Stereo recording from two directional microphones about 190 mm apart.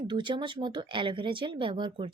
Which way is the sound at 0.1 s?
25° right (ahead or behind).